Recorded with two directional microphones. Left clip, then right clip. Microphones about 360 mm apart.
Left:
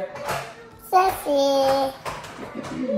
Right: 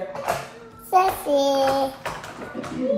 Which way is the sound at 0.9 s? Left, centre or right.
Centre.